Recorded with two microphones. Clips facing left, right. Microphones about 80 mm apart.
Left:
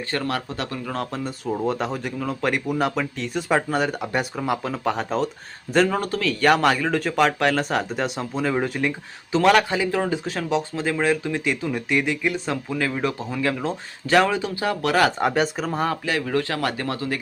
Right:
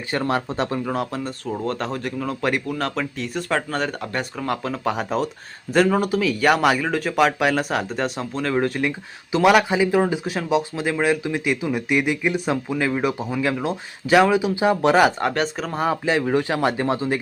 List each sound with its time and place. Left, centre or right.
0.1 s speech: right
0.9 s speech: centre
2.6 s speech: centre
14.5 s speech: right
15.2 s speech: centre
16.0 s speech: right